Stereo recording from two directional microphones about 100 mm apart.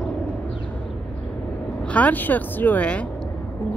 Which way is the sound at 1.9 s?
15° left (ahead or behind).